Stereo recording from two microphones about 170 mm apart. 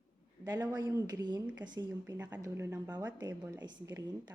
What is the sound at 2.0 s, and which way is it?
Speech, 15° right (ahead or behind).